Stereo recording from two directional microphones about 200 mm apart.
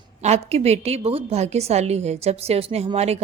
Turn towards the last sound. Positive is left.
turn(degrees=-30)  # may be behind; listen again after turning